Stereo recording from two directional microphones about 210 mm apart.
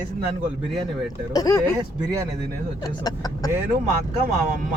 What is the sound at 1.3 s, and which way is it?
Speech, 15° left (ahead or behind).